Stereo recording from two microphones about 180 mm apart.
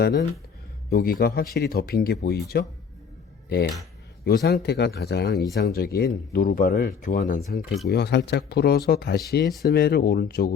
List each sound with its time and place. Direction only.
0.0 s speech: 65° left (ahead or behind)
0.9 s speech: 55° left (ahead or behind)
4.3 s speech: 65° left (ahead or behind)
6.3 s speech: 50° left (ahead or behind)
7.9 s speech: 65° left (ahead or behind)